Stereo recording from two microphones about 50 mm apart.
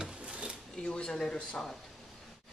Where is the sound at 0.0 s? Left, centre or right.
Right.